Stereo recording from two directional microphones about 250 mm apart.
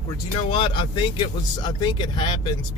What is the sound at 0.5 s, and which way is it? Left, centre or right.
Speech, centre.